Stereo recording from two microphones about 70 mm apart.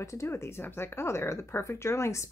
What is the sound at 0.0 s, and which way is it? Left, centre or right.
Speech, left.